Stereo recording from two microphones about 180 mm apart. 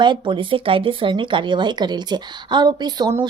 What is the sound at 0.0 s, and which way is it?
A woman's voice, 25° right (ahead or behind).